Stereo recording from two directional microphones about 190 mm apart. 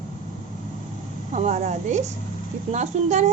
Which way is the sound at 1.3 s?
40° right (ahead or behind).